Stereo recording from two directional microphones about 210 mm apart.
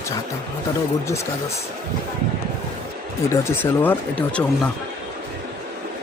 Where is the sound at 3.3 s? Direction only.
10° left (ahead or behind).